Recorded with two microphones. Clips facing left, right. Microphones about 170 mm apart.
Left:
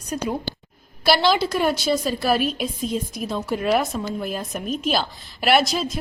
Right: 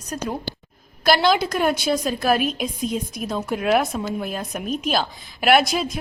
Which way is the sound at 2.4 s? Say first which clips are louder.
Even; 50° right (ahead or behind).